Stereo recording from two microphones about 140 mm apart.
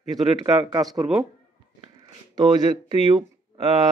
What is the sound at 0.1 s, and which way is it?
Speech, 30° right (ahead or behind).